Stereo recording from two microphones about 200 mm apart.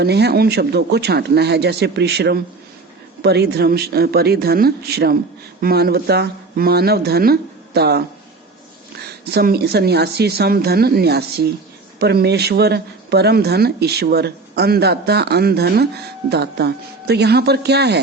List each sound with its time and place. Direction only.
0.0 s speech: 55° right (ahead or behind)
9.0 s speech: 50° right (ahead or behind)